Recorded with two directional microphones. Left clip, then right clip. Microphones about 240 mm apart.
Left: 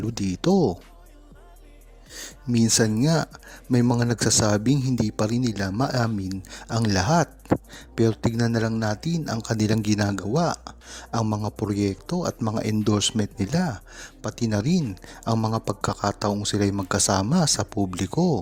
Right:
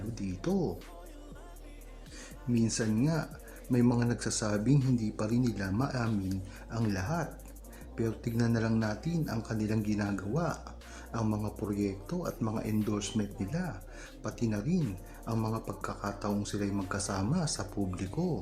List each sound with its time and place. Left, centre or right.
0.1 s speech: left
2.1 s speech: left